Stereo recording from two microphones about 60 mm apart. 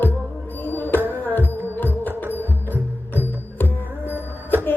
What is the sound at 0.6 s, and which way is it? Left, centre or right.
Music, left.